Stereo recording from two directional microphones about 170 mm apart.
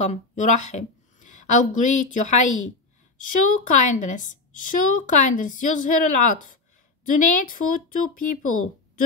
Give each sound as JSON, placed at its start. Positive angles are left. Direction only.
{"t": 0.0, "sound": "a woman's voice", "side_deg": 45}